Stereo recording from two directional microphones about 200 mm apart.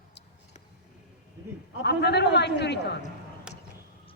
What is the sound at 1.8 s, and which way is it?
A woman's voice, 55° left (ahead or behind).